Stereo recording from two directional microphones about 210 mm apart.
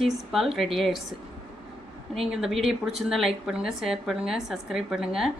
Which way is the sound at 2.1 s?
Centre (ahead or behind).